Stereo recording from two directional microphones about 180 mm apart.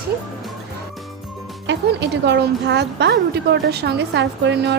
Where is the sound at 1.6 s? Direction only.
75° right (ahead or behind).